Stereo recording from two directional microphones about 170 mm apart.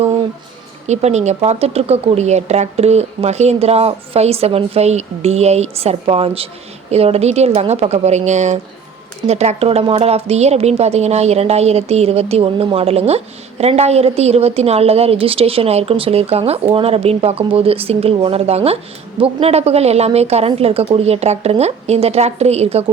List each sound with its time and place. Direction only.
0.9 s a woman's voice: 40° right (ahead or behind)